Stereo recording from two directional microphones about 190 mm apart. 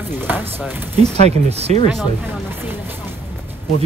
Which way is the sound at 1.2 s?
35° right (ahead or behind).